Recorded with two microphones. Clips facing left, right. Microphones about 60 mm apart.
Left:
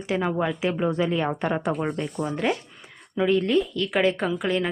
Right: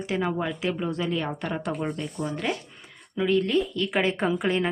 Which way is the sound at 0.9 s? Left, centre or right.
Left.